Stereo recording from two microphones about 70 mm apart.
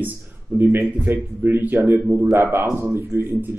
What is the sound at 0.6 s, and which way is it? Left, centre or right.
A man's voice, right.